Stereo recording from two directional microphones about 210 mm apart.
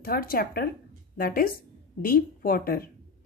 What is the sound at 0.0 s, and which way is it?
Speech, 45° left (ahead or behind).